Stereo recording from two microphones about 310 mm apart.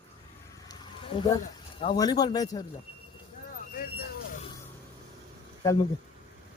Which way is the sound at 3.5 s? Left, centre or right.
Left.